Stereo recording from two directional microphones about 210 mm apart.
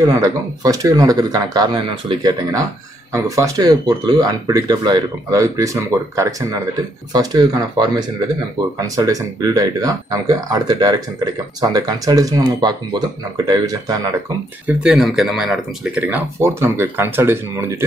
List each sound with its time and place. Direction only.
0.1 s speech: 15° right (ahead or behind)
14.7 s speech: 5° right (ahead or behind)